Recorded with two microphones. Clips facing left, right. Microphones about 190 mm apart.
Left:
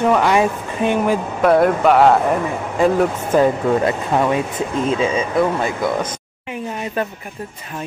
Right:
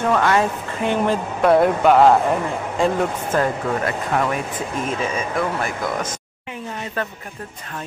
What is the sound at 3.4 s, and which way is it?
Speech, 20° left (ahead or behind).